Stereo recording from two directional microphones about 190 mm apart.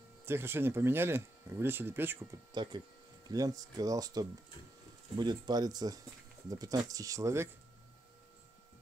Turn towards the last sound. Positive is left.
turn(degrees=-15)  # may be behind; listen again after turning